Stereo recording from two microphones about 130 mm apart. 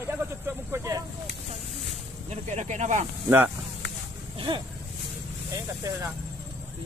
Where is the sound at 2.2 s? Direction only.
65° right (ahead or behind).